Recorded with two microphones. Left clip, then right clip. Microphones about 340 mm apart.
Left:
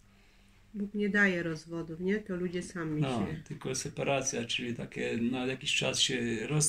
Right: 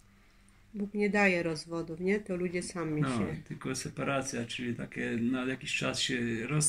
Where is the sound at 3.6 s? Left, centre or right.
Left.